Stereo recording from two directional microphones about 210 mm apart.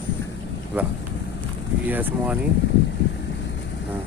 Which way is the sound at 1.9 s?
10° right (ahead or behind).